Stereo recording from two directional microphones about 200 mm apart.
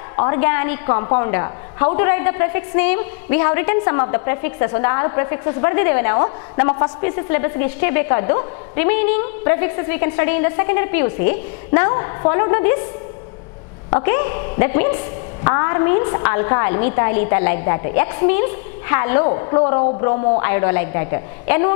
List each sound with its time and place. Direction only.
0.1 s a woman's voice: 15° left (ahead or behind)
13.8 s a woman's voice: 15° left (ahead or behind)